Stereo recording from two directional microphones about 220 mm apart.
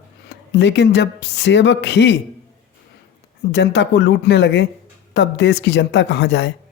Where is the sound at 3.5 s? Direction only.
55° left (ahead or behind).